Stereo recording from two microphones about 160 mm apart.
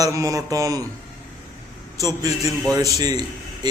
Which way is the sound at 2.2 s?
20° right (ahead or behind).